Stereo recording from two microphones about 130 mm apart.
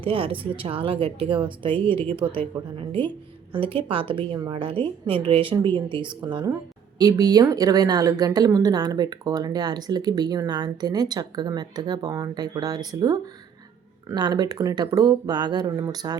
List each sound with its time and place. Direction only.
0.0 s a woman's voice: 40° right (ahead or behind)